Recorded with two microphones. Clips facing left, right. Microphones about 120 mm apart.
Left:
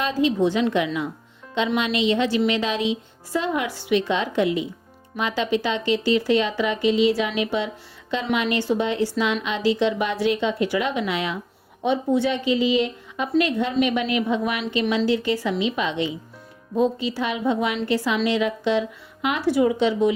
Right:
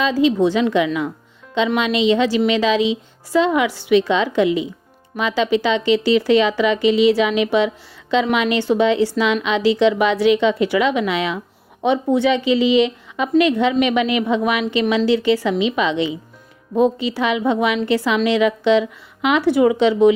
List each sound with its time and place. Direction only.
0.0 s a woman's voice: 90° right
8.1 s a woman's voice: 90° right
11.8 s a woman's voice: 70° right (ahead or behind); by 16.1 s 90° right
16.7 s speech: 70° right (ahead or behind)